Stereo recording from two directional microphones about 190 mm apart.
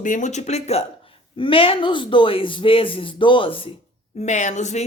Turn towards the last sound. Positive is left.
turn(degrees=40)  # may be behind; listen again after turning